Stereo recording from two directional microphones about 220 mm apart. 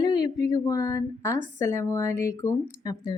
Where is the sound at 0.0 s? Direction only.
20° left (ahead or behind).